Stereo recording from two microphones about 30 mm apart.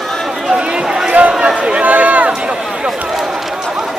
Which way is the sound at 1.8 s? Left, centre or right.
Right.